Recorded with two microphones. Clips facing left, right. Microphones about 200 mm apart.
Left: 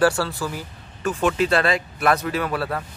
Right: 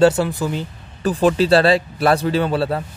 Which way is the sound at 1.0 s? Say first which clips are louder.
Right 5 dB; 35° right (ahead or behind).